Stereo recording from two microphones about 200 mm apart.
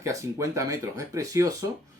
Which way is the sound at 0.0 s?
15° right (ahead or behind).